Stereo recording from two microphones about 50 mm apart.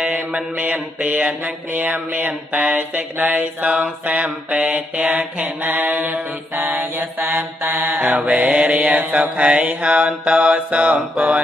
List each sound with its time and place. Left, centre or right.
0.0 s mantra: centre; by 5.9 s right
5.9 s mantra: centre
6.7 s mantra: right
8.0 s mantra: right